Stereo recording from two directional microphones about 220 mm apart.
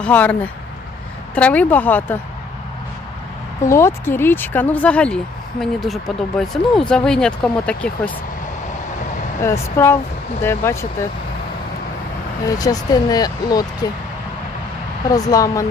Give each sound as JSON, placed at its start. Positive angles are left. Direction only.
{"t": 0.0, "sound": "speech", "side_deg": 5}
{"t": 1.4, "sound": "speech", "side_deg": 5}
{"t": 3.7, "sound": "speech", "side_deg": 10}
{"t": 9.4, "sound": "speech", "side_deg": 10}
{"t": 12.5, "sound": "speech", "side_deg": 15}
{"t": 15.1, "sound": "speech", "side_deg": 15}